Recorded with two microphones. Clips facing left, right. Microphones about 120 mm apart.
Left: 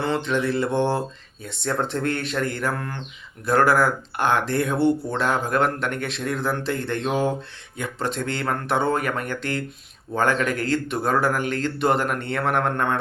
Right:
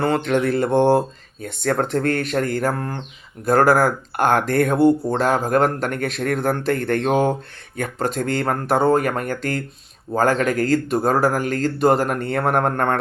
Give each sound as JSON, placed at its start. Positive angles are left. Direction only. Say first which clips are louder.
{"t": 0.0, "sound": "speech", "louder": "right 4 dB", "side_deg": -50}